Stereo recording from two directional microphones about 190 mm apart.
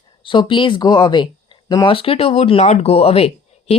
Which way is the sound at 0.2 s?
25° left (ahead or behind).